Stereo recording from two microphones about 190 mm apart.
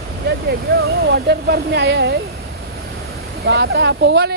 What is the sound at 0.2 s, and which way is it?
Speech, 60° right (ahead or behind).